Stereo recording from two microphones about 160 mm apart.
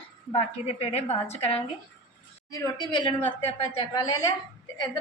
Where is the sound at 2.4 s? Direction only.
20° left (ahead or behind).